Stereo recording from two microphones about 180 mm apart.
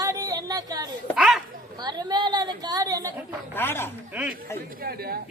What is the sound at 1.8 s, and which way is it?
Chatter, 25° right (ahead or behind).